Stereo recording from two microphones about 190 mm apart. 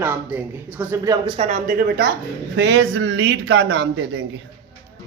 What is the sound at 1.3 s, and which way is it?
Speech, 40° right (ahead or behind).